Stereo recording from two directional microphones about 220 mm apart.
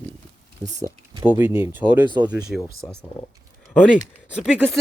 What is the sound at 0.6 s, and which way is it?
Speech, 35° right (ahead or behind).